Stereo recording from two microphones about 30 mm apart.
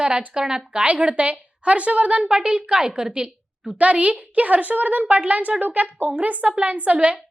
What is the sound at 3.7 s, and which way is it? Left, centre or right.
A woman's voice, right.